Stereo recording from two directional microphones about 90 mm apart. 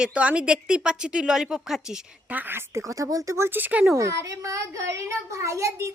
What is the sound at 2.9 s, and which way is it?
A child's voice, 40° right (ahead or behind).